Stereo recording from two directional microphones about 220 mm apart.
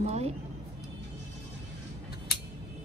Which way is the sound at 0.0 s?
30° right (ahead or behind).